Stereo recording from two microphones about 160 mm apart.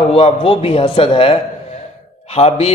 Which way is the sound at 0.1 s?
35° left (ahead or behind).